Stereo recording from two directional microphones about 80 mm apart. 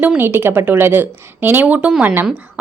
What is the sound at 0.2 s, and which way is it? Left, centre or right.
A woman's voice, right.